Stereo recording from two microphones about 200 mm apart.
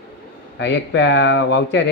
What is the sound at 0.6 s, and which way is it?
A man's voice, 60° left (ahead or behind).